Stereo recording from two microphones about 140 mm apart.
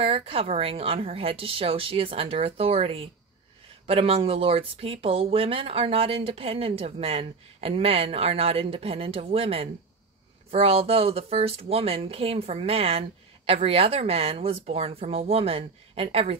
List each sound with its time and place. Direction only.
0.0 s speech: 45° right (ahead or behind)